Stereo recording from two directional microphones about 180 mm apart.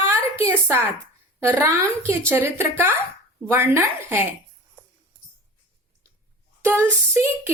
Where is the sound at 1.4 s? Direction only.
15° right (ahead or behind).